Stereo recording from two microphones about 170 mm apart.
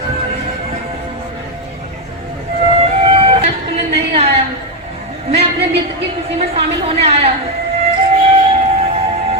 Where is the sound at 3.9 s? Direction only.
35° right (ahead or behind).